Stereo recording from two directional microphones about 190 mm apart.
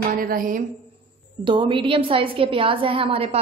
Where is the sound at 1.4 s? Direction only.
25° right (ahead or behind).